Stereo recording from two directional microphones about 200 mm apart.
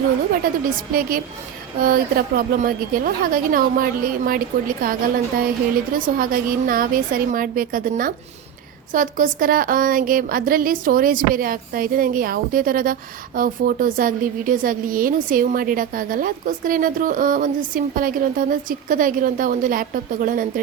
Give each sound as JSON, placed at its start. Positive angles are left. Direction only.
{"t": 0.6, "sound": "speech", "side_deg": -45}